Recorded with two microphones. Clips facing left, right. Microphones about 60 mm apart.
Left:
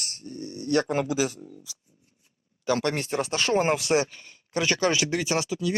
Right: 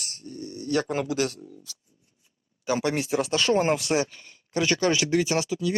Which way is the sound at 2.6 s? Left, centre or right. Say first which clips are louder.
Even; centre.